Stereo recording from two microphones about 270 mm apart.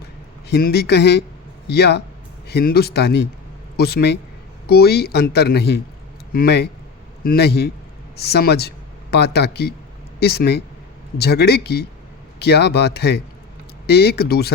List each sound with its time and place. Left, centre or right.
0.4 s a man's voice: left